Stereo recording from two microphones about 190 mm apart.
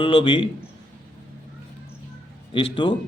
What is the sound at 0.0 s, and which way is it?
Speech, 25° left (ahead or behind).